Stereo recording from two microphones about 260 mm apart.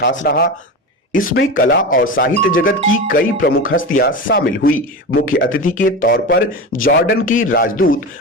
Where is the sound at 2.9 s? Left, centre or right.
Left.